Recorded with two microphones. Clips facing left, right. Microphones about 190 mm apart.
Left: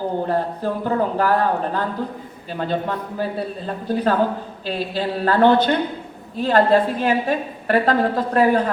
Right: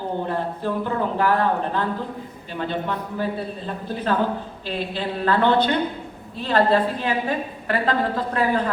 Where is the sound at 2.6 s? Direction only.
40° left (ahead or behind).